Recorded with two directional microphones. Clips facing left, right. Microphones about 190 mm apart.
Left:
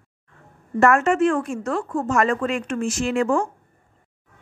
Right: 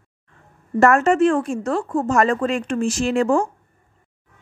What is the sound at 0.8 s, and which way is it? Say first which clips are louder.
Speech: right 2 dB; 35° right (ahead or behind).